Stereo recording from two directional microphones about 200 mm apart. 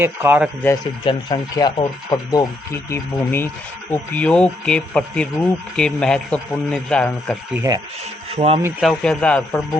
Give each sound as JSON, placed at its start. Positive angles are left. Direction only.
{"t": 0.0, "sound": "speech", "side_deg": -10}
{"t": 1.0, "sound": "speech", "side_deg": 25}
{"t": 8.3, "sound": "speech", "side_deg": -30}
{"t": 8.8, "sound": "speech", "side_deg": 0}